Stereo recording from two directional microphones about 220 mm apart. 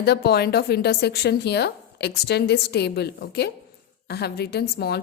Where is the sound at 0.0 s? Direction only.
45° left (ahead or behind).